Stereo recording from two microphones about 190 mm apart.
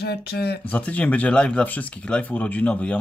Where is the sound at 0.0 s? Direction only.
60° left (ahead or behind).